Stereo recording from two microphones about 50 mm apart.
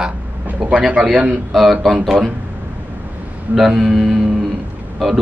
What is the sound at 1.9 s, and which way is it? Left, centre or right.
Speech, centre.